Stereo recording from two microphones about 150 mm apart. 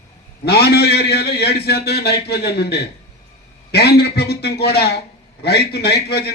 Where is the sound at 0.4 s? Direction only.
90° left.